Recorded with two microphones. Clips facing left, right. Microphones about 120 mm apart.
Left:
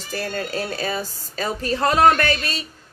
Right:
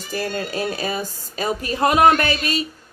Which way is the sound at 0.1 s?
15° right (ahead or behind).